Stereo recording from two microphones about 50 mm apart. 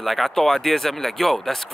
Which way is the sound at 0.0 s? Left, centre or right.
Centre.